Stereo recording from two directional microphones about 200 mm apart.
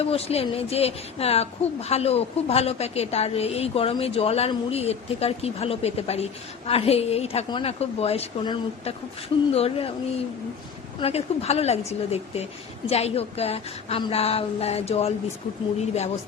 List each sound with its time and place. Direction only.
0.0 s a woman's voice: 30° left (ahead or behind)
11.0 s a woman's voice: 30° left (ahead or behind)